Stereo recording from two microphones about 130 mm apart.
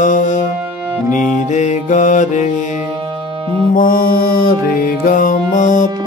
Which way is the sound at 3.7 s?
90° left.